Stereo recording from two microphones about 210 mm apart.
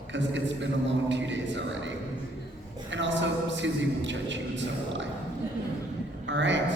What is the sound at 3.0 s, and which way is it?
A man's voice, 60° right (ahead or behind).